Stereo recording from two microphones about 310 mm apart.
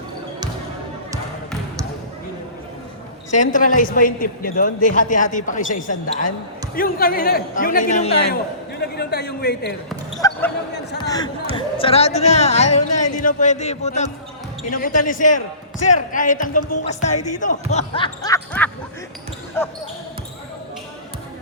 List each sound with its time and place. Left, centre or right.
3.3 s a man's voice: left
10.2 s basketball bounce: centre
10.9 s a man's voice: centre
17.1 s music: left
17.4 s speech: left